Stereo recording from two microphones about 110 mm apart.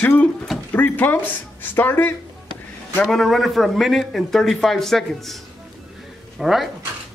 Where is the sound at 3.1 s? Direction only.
Centre (ahead or behind).